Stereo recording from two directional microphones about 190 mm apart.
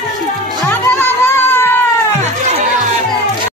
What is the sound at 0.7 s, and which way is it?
Music, 10° left (ahead or behind).